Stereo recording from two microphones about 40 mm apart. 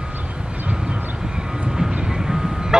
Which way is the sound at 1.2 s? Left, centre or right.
Centre.